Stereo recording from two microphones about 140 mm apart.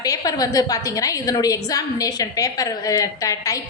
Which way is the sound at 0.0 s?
25° left (ahead or behind).